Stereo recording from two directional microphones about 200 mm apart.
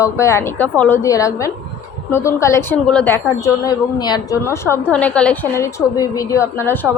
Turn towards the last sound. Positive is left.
turn(degrees=10)  # may be behind; listen again after turning